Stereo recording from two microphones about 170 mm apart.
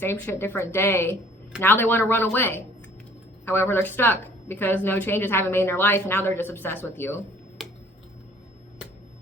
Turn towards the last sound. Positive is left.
turn(degrees=0)  # may be behind; listen again after turning